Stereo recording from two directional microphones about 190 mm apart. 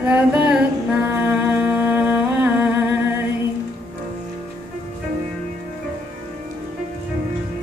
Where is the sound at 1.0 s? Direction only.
10° right (ahead or behind).